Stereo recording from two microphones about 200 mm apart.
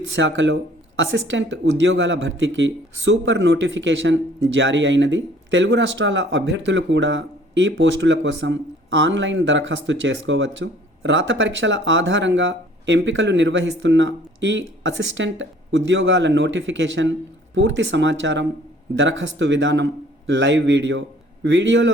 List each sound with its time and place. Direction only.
0.1 s speech: 65° right (ahead or behind)